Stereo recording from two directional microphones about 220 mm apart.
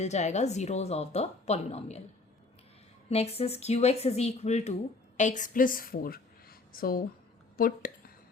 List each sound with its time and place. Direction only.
0.0 s speech: 30° left (ahead or behind)
3.1 s speech: 25° left (ahead or behind)
7.5 s a sound: 40° left (ahead or behind)